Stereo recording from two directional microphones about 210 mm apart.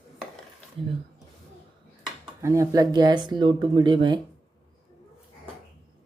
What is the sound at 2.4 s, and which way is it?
Speech, 15° right (ahead or behind).